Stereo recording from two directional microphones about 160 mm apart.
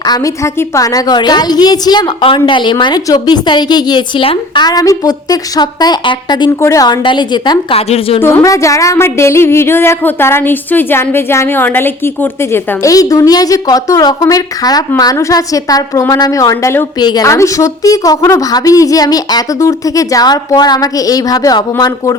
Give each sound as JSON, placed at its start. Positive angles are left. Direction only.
{"t": 0.0, "sound": "speech", "side_deg": 20}
{"t": 8.2, "sound": "speech", "side_deg": 20}